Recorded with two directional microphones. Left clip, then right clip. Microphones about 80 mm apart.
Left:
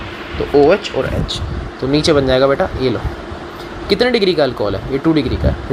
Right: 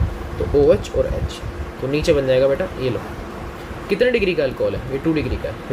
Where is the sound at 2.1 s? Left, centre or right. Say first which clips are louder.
Left 3 dB; left.